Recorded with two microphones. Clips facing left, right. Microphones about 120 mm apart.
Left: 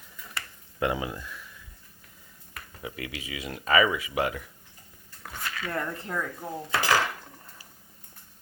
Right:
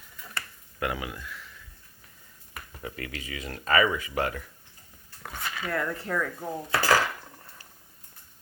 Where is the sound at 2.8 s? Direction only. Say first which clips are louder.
Even; 10° left (ahead or behind).